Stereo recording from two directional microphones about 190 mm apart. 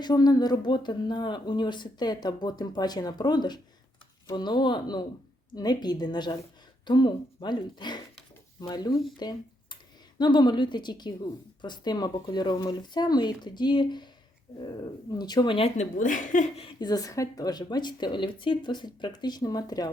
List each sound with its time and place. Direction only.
0.0 s speech: 20° left (ahead or behind)
9.1 s a sound: 20° left (ahead or behind)
10.2 s speech: 25° left (ahead or behind)